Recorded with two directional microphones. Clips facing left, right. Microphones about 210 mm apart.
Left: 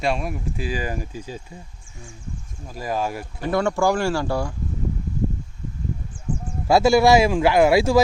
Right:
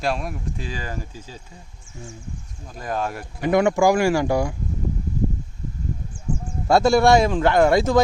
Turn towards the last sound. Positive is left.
turn(degrees=10)  # may be behind; listen again after turning